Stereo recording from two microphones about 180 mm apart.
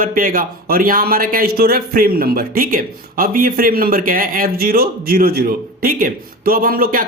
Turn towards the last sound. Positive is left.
turn(degrees=-55)  # may be behind; listen again after turning